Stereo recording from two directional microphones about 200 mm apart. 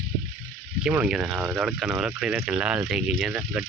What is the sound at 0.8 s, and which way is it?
Speech, 5° right (ahead or behind).